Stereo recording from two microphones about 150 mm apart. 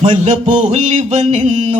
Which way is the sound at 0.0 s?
45° right (ahead or behind).